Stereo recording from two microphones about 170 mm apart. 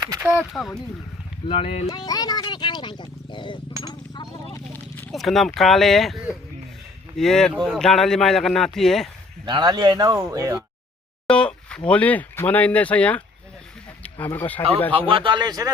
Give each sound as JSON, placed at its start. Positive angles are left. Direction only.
{"t": 0.2, "sound": "speech", "side_deg": 0}
{"t": 1.5, "sound": "speech", "side_deg": 35}
{"t": 1.9, "sound": "speech", "side_deg": 20}
{"t": 3.8, "sound": "a sound", "side_deg": 25}
{"t": 5.1, "sound": "speech", "side_deg": 0}
{"t": 7.2, "sound": "speech", "side_deg": 5}
{"t": 9.5, "sound": "speech", "side_deg": -25}
{"t": 11.3, "sound": "a sound", "side_deg": 5}
{"t": 11.9, "sound": "speech", "side_deg": 10}
{"t": 14.9, "sound": "speech", "side_deg": -30}